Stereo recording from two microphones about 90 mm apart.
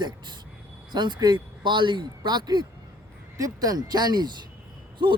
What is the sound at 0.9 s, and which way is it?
Speech, 55° right (ahead or behind).